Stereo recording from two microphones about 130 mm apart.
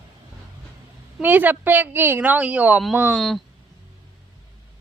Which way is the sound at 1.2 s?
15° right (ahead or behind).